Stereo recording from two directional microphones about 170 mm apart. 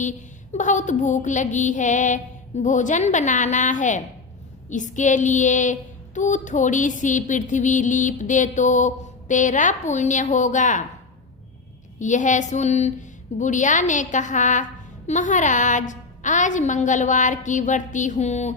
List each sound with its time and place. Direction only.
0.0 s a woman's voice: 45° left (ahead or behind)
11.9 s a woman's voice: 45° left (ahead or behind)